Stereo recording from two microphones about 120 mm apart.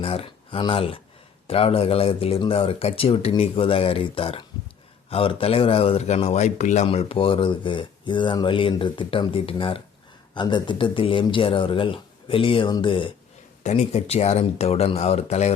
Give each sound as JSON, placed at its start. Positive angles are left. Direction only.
{"t": 0.0, "sound": "a sound", "side_deg": 55}
{"t": 0.6, "sound": "speech", "side_deg": 50}
{"t": 13.6, "sound": "speech", "side_deg": 70}